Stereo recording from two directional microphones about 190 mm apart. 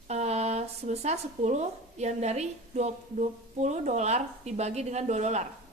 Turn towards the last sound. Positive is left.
turn(degrees=-35)  # may be behind; listen again after turning